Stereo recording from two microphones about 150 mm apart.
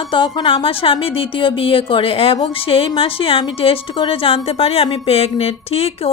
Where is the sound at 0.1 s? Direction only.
30° left (ahead or behind).